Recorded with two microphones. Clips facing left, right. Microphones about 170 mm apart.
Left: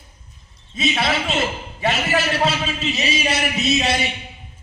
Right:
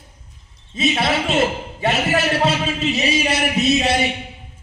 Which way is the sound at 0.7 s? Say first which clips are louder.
Right 2 dB; 30° right (ahead or behind).